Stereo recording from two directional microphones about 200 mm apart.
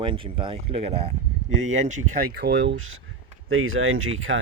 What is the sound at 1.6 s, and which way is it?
Speech, 35° right (ahead or behind).